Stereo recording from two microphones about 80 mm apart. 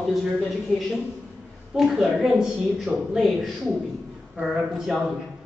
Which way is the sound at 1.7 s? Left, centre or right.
Centre.